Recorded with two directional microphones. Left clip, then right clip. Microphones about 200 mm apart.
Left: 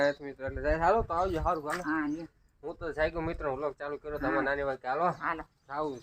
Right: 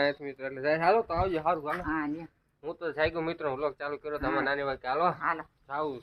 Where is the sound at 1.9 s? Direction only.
25° right (ahead or behind).